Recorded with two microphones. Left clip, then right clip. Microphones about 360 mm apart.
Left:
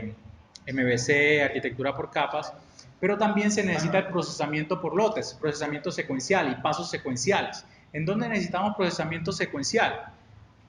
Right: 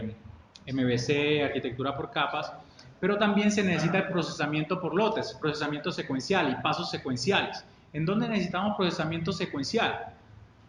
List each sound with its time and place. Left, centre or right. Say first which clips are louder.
0.5 s speech: left 3 dB; centre